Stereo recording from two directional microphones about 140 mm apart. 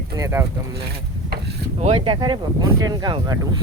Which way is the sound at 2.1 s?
35° right (ahead or behind).